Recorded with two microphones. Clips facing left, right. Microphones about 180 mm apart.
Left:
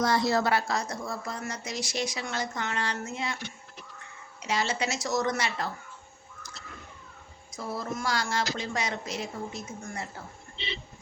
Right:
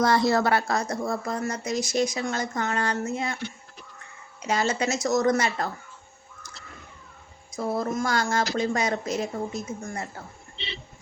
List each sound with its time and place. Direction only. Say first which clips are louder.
0.0 s a woman's voice: right 4 dB; 60° right (ahead or behind)
4.4 s a woman's voice: right 4 dB; 45° right (ahead or behind)
7.5 s a woman's voice: right 7 dB; 50° right (ahead or behind)